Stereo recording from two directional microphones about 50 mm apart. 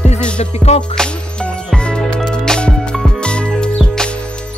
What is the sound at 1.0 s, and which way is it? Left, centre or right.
Music, centre.